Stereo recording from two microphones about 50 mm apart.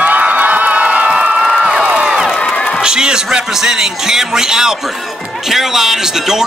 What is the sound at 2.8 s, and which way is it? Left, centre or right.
Speech, centre.